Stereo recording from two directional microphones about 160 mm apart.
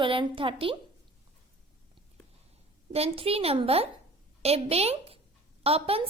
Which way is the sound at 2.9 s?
40° right (ahead or behind).